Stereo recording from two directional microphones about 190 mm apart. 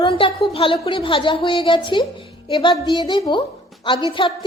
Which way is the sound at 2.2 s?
30° left (ahead or behind).